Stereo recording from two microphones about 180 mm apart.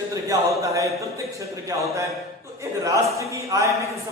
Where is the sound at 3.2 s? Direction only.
15° right (ahead or behind).